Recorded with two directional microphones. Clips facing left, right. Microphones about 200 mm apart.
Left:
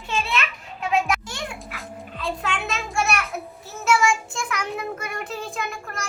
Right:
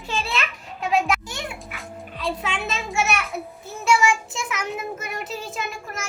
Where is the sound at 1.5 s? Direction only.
Centre (ahead or behind).